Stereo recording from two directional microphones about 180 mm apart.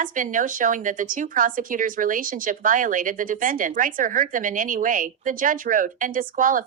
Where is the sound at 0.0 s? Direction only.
45° right (ahead or behind).